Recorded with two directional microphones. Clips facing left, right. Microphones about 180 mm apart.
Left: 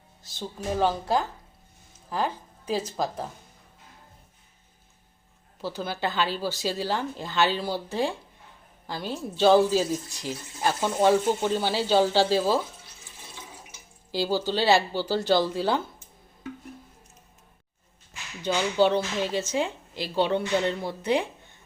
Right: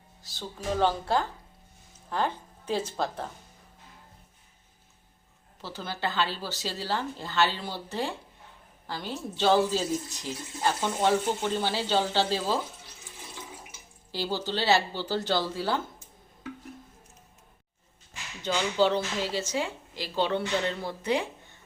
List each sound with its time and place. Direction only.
0.2 s music: 20° left (ahead or behind)
0.8 s a woman's voice: 10° left (ahead or behind)
5.6 s speech: 15° left (ahead or behind)
14.1 s speech: 10° left (ahead or behind)
18.4 s a woman's voice: 15° left (ahead or behind)